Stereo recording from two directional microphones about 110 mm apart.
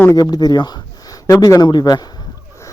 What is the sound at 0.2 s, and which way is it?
Speech, 40° left (ahead or behind).